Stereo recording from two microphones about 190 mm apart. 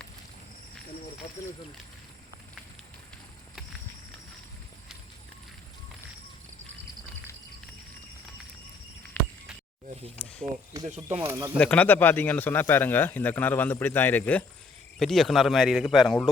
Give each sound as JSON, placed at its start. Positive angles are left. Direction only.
{"t": 9.2, "sound": "a sound", "side_deg": 10}
{"t": 10.8, "sound": "speech", "side_deg": -35}
{"t": 11.2, "sound": "speech", "side_deg": -20}
{"t": 11.5, "sound": "a man's voice", "side_deg": 5}